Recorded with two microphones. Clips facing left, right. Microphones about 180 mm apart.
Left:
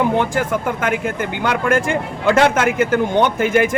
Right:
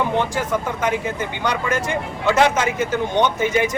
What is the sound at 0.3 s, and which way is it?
Speech, 55° left (ahead or behind).